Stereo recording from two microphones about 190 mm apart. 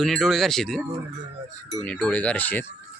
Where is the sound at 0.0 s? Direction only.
Centre (ahead or behind).